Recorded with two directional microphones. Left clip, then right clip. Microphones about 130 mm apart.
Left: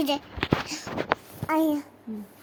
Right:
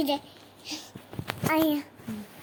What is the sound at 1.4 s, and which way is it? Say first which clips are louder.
Speech: right 2 dB; 10° left (ahead or behind).